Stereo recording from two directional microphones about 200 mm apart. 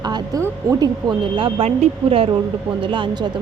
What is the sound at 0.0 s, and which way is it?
Speech, 20° right (ahead or behind).